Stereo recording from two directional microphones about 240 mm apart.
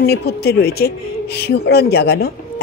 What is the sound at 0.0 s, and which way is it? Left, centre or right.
Speech, left.